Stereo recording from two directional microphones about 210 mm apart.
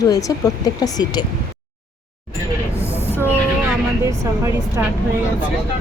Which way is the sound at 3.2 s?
15° right (ahead or behind).